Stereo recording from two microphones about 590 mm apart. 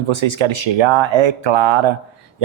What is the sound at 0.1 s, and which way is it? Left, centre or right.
Speech, right.